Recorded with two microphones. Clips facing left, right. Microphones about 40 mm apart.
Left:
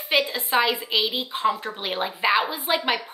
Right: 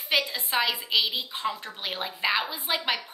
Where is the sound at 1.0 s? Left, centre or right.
Left.